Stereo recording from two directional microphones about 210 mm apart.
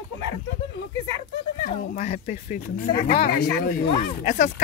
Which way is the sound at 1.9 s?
35° left (ahead or behind).